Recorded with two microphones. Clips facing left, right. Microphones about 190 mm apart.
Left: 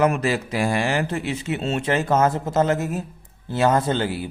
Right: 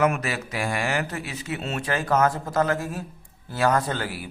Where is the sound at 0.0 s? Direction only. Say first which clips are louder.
Left 4 dB; 30° left (ahead or behind).